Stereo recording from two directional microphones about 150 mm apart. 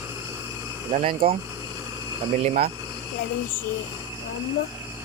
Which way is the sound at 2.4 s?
50° right (ahead or behind).